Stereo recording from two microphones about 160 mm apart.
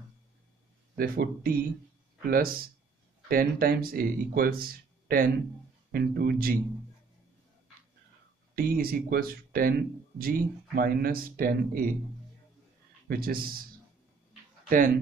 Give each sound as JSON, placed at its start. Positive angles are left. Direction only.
{"t": 0.9, "sound": "speech", "side_deg": -65}
{"t": 5.9, "sound": "speech", "side_deg": -75}
{"t": 8.5, "sound": "speech", "side_deg": -65}
{"t": 13.1, "sound": "speech", "side_deg": -65}